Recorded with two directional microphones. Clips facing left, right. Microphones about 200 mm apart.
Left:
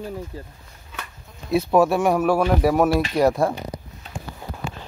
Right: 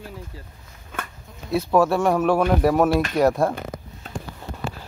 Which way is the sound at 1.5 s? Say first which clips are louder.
Left 1 dB; 15° left (ahead or behind).